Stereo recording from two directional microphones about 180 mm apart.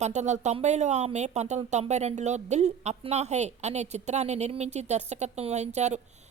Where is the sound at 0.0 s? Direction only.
40° right (ahead or behind).